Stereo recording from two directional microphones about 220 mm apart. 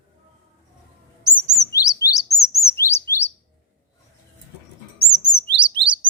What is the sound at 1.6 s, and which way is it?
Chirp, 15° left (ahead or behind).